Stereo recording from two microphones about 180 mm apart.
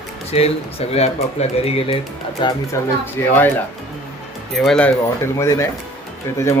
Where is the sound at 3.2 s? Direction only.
15° left (ahead or behind).